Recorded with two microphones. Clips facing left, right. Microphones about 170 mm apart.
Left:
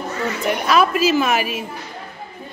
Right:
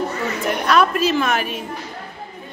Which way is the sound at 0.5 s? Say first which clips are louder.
Even; 5° left (ahead or behind).